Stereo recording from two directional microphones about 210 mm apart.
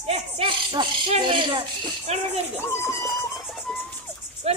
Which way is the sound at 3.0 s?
Centre (ahead or behind).